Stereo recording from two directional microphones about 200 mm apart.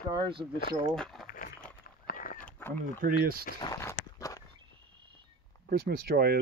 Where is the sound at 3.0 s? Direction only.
45° right (ahead or behind).